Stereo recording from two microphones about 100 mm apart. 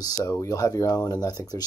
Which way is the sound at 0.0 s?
35° left (ahead or behind).